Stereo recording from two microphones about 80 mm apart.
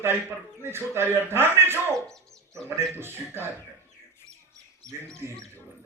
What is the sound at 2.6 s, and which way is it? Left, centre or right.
Speech, right.